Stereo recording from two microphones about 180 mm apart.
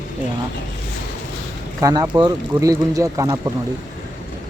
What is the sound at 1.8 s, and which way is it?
Speech, 20° right (ahead or behind).